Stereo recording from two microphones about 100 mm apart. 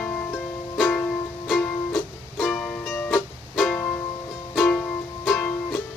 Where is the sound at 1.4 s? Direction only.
Centre (ahead or behind).